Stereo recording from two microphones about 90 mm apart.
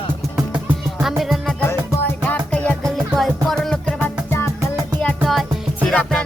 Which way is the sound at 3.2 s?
Centre (ahead or behind).